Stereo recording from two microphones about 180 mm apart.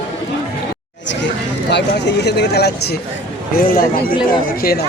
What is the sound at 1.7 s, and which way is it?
Speech, 70° left (ahead or behind).